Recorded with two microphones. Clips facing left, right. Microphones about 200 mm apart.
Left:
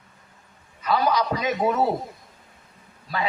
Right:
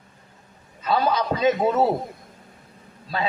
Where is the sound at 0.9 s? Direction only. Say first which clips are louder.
Even; 25° right (ahead or behind).